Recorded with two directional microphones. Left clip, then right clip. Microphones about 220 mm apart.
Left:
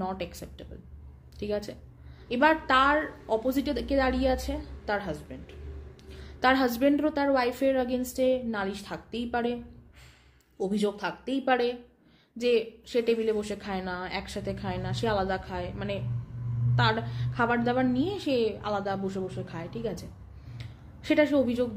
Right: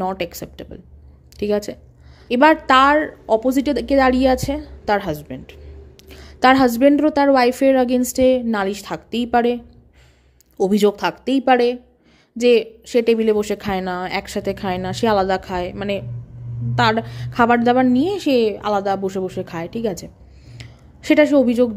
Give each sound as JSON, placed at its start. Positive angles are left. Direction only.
{"t": 0.0, "sound": "a woman's voice", "side_deg": -35}
{"t": 10.6, "sound": "a woman's voice", "side_deg": -40}
{"t": 20.5, "sound": "a sound", "side_deg": -40}